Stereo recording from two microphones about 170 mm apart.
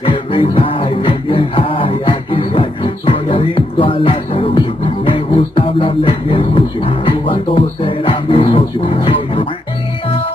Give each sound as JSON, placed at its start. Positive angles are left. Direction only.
{"t": 0.0, "sound": "music", "side_deg": 30}